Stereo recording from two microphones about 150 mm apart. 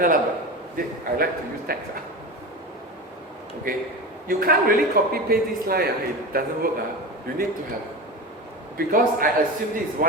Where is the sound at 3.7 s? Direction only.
70° right (ahead or behind).